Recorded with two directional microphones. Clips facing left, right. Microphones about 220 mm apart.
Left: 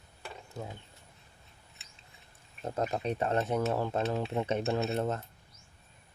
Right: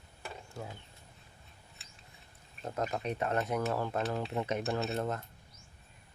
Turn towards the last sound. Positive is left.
turn(degrees=25)  # may be behind; listen again after turning